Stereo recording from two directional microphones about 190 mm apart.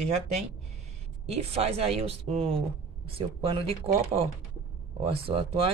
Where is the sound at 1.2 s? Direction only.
30° right (ahead or behind).